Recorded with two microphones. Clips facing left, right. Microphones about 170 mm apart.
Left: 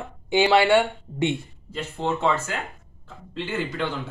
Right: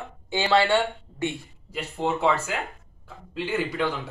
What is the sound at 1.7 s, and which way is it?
Speech, 10° right (ahead or behind).